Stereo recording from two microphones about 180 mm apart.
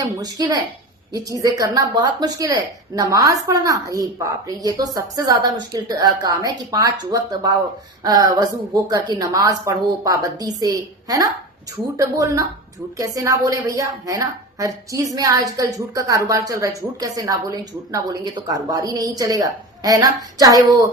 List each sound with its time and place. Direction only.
0.0 s speech: 20° right (ahead or behind)